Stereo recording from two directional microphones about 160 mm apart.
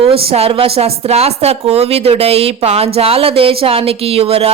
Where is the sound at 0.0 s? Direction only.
35° right (ahead or behind).